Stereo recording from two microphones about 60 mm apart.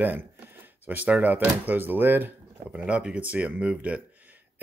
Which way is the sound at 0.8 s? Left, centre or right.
Right.